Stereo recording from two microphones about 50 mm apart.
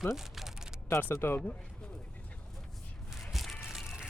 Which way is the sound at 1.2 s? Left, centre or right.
Left.